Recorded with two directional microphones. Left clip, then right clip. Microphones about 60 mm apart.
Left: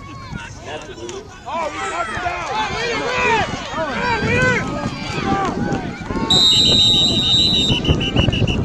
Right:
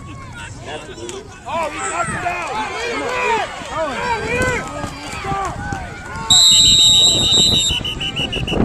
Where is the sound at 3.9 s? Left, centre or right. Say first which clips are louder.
Left 4 dB; left.